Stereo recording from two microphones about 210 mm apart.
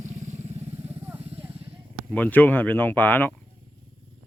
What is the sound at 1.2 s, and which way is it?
Vehicle, 30° right (ahead or behind).